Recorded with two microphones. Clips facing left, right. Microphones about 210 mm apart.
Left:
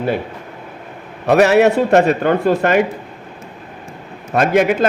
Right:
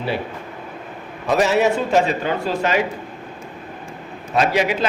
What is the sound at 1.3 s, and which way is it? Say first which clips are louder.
A man's voice: left 6 dB; 65° left (ahead or behind).